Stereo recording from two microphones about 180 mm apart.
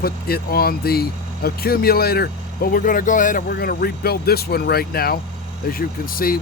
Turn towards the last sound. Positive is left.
turn(degrees=55)  # may be behind; listen again after turning